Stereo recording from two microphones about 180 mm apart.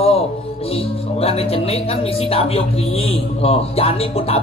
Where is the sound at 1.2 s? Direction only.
35° left (ahead or behind).